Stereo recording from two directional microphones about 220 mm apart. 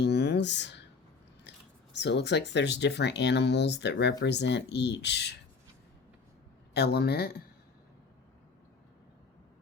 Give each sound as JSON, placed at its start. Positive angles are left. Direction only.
{"t": 0.0, "sound": "a sound", "side_deg": 50}
{"t": 1.5, "sound": "speech", "side_deg": 50}
{"t": 6.7, "sound": "speech", "side_deg": 45}